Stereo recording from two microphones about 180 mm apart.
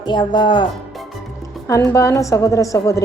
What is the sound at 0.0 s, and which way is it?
Speech, 25° left (ahead or behind).